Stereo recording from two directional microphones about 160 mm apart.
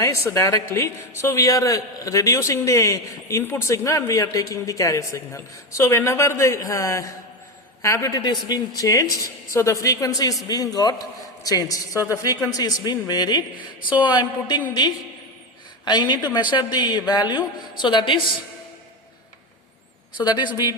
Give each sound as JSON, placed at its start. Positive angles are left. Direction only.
{"t": 0.0, "sound": "a woman's voice", "side_deg": 20}
{"t": 20.1, "sound": "a man's voice", "side_deg": 25}